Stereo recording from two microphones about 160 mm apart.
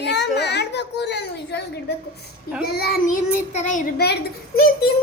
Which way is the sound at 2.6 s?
75° left (ahead or behind).